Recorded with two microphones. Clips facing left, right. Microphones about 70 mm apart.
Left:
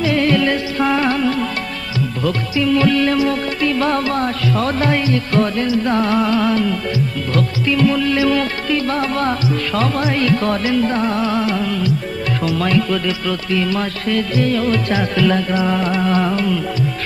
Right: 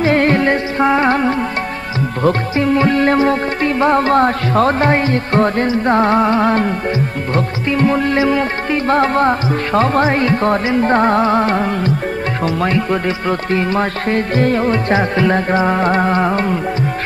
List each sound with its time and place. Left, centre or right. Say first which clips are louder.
0.0 s music: right 3 dB; right
4.1 s music: right 6 dB; right